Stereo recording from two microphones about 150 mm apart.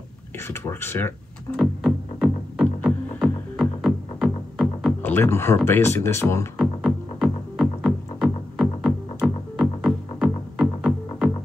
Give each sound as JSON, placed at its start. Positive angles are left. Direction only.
{"t": 0.5, "sound": "speech", "side_deg": 15}
{"t": 1.6, "sound": "music", "side_deg": -5}
{"t": 5.0, "sound": "speech", "side_deg": 15}
{"t": 6.6, "sound": "music", "side_deg": 0}